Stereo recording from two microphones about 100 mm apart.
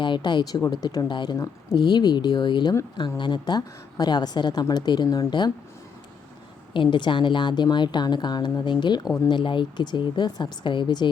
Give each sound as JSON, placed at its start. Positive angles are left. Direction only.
{"t": 0.0, "sound": "a woman's voice", "side_deg": 50}
{"t": 6.7, "sound": "a woman's voice", "side_deg": 55}